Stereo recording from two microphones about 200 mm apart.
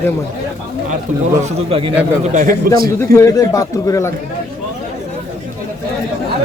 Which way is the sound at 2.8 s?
15° left (ahead or behind).